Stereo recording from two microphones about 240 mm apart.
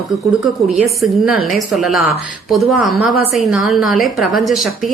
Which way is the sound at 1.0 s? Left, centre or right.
Centre.